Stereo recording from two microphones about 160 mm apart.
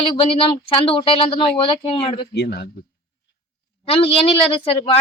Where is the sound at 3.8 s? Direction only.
35° left (ahead or behind).